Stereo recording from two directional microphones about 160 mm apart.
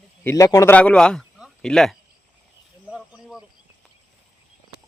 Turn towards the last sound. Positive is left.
turn(degrees=-5)  # may be behind; listen again after turning